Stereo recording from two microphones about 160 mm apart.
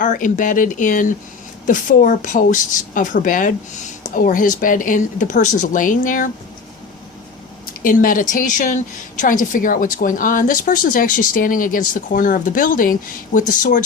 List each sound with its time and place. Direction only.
0.0 s a woman's voice: 55° left (ahead or behind)
7.8 s a woman's voice: 60° left (ahead or behind)